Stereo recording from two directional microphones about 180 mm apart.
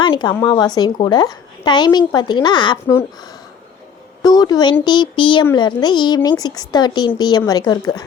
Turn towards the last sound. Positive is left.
turn(degrees=20)  # may be behind; listen again after turning